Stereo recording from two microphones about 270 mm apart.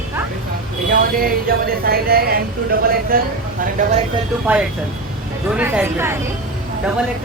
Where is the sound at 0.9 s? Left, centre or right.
Right.